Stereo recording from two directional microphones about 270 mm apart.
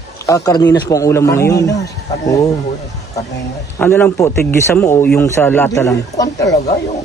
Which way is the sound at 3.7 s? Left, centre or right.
Centre.